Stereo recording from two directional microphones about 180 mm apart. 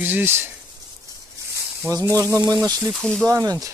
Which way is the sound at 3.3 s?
20° right (ahead or behind).